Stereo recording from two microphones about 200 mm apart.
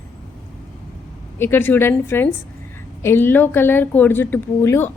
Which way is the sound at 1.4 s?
10° left (ahead or behind).